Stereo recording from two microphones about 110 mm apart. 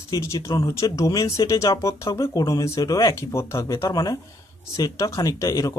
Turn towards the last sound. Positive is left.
turn(degrees=30)  # may be behind; listen again after turning